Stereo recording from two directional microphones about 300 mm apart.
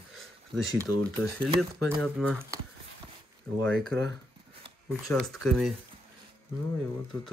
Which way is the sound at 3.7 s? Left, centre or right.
Right.